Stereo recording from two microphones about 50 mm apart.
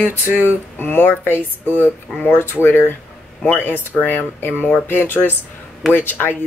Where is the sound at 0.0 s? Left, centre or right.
Left.